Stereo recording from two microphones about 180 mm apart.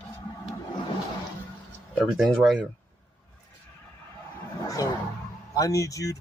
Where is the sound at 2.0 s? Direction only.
Centre (ahead or behind).